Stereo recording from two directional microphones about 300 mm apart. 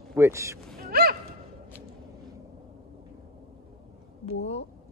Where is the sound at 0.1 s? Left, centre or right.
Centre.